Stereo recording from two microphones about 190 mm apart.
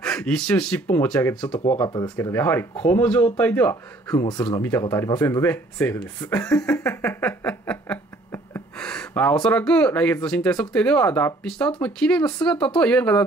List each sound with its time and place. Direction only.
0.0 s speech: 5° left (ahead or behind)
1.5 s speech: 30° left (ahead or behind)
2.1 s speech: 10° left (ahead or behind)
4.1 s speech: 20° left (ahead or behind)
6.6 s a sound: 5° left (ahead or behind)
12.4 s speech: 5° left (ahead or behind)